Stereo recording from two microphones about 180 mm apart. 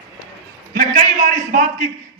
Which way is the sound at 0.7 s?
50° right (ahead or behind).